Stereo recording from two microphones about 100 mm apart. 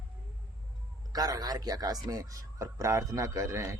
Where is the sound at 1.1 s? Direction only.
40° right (ahead or behind).